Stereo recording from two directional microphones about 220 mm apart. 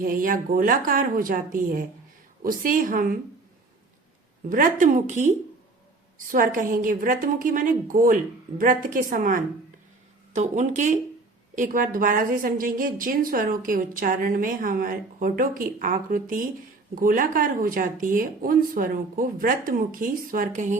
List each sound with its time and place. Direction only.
0.0 s a woman's voice: 40° right (ahead or behind)
4.4 s a woman's voice: 40° right (ahead or behind)